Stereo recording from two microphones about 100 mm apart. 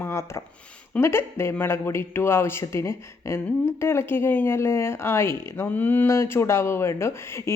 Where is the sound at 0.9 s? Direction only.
25° left (ahead or behind).